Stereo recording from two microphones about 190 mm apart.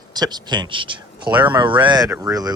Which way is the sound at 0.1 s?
20° right (ahead or behind).